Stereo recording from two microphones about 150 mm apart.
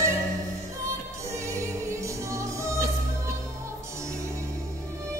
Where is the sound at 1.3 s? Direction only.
20° right (ahead or behind).